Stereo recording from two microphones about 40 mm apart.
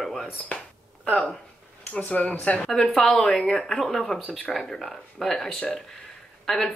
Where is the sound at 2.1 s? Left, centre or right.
Left.